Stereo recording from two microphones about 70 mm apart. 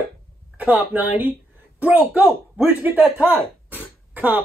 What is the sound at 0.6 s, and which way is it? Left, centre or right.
Speech, right.